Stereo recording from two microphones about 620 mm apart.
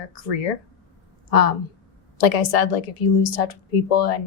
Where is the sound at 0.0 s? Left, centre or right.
Left.